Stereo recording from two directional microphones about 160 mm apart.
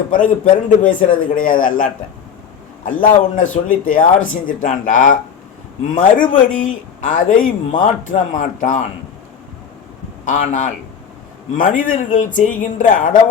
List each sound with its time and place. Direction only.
0.1 s speech: 55° left (ahead or behind)
10.2 s speech: 55° left (ahead or behind)